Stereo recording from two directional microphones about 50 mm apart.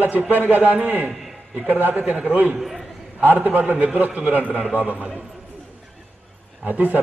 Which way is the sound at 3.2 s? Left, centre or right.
Right.